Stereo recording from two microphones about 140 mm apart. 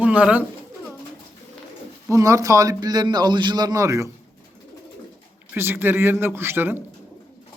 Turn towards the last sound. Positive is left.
turn(degrees=-15)  # may be behind; listen again after turning